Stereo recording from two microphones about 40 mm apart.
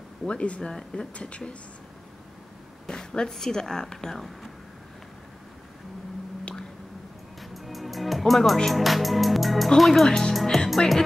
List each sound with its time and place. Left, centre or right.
0.3 s speech: left
2.9 s speech: centre
7.5 s music: centre
8.2 s speech: centre
10.0 s speech: centre
10.4 s music: centre